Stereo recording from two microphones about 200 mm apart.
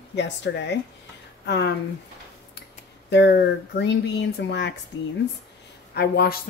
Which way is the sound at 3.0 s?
60° left (ahead or behind).